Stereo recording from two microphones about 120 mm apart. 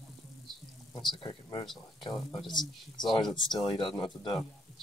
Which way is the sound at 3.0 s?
35° left (ahead or behind).